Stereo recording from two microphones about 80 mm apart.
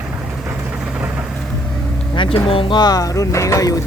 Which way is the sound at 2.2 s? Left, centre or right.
Left.